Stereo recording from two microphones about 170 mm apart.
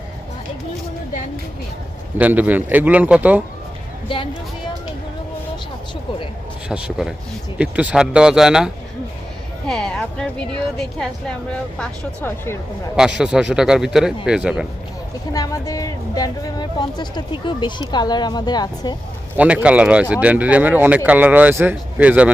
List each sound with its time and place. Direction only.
2.1 s speech: 10° right (ahead or behind)
6.7 s a woman's voice: 5° right (ahead or behind)
13.0 s a woman's voice: 5° right (ahead or behind)
15.3 s speech: 20° left (ahead or behind)
19.4 s speech: 10° right (ahead or behind)